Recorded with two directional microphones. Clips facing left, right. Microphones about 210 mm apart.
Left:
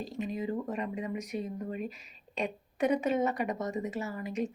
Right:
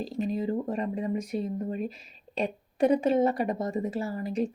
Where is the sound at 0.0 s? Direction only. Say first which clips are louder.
Right 5 dB; 35° right (ahead or behind).